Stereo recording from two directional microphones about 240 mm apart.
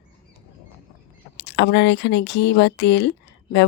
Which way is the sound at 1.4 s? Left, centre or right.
Left.